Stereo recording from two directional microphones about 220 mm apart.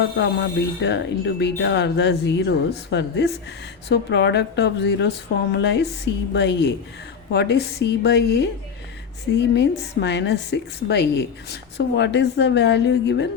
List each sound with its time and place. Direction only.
0.0 s a woman's voice: 50° left (ahead or behind)